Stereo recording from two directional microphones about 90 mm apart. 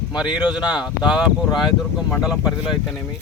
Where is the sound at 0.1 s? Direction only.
10° right (ahead or behind).